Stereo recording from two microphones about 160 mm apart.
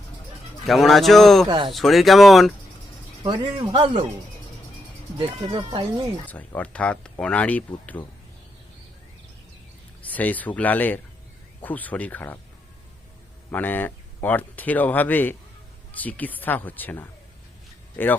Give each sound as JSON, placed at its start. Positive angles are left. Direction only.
{"t": 0.6, "sound": "speech", "side_deg": 0}
{"t": 1.5, "sound": "speech", "side_deg": -30}
{"t": 1.7, "sound": "speech", "side_deg": 0}
{"t": 3.2, "sound": "speech", "side_deg": -30}
{"t": 5.1, "sound": "speech", "side_deg": -30}
{"t": 6.2, "sound": "speech", "side_deg": 10}
{"t": 10.0, "sound": "speech", "side_deg": 10}
{"t": 13.5, "sound": "speech", "side_deg": 10}